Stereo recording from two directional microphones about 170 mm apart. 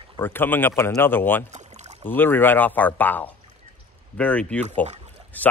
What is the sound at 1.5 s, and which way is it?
Rowboat, 45° right (ahead or behind).